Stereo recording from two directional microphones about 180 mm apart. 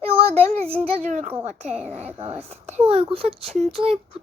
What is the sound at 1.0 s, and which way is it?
Speech, 40° right (ahead or behind).